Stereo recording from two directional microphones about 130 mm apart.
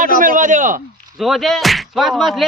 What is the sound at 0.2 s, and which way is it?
Speech, 90° right.